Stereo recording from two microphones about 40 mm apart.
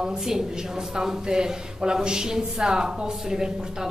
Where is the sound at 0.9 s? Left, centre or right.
Centre.